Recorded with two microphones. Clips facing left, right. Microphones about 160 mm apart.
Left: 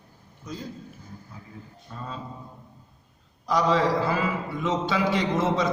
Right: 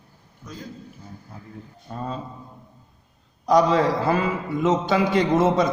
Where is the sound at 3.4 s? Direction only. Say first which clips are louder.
Right 5 dB; 45° right (ahead or behind).